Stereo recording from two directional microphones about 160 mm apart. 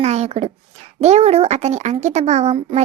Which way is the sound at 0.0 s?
40° right (ahead or behind).